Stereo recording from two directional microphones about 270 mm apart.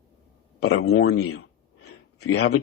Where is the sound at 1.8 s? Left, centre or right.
Left.